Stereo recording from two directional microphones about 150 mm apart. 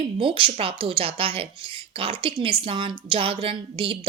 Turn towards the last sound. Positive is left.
turn(degrees=-35)  # may be behind; listen again after turning